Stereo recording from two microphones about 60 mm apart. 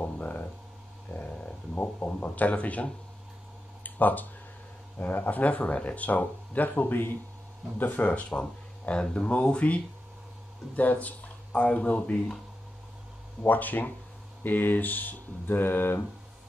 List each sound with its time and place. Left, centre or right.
0.0 s a sound: left
1.8 s speech: left
3.8 s a sound: left
4.9 s speech: left
10.8 s speech: left
13.4 s speech: left